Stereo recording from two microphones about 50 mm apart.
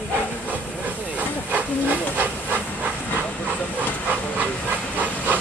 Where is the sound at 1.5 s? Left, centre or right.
Right.